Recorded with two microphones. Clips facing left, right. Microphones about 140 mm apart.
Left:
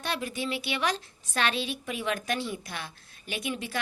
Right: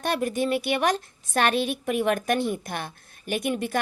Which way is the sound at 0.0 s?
50° right (ahead or behind).